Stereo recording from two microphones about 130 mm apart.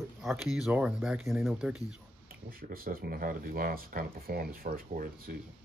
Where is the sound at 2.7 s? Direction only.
90° right.